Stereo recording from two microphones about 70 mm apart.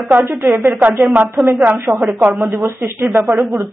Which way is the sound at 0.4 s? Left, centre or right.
Right.